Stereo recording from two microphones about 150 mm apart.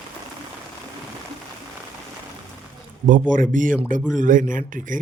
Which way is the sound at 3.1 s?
60° right (ahead or behind).